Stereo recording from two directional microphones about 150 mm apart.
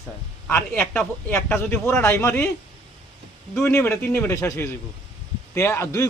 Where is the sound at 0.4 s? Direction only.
5° left (ahead or behind).